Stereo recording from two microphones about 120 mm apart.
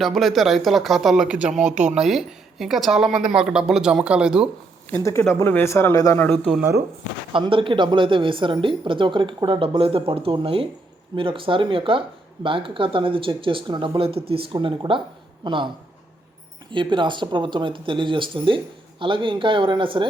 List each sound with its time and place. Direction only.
0.0 s speech: centre (ahead or behind)
1.7 s speech: 80° right
2.0 s speech: centre (ahead or behind)
5.3 s speech: 20° left (ahead or behind)
6.2 s speech: 15° left (ahead or behind)
7.3 s speech: 45° right (ahead or behind)
16.7 s speech: 40° right (ahead or behind)